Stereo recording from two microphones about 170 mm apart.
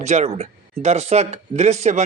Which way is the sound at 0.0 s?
40° right (ahead or behind).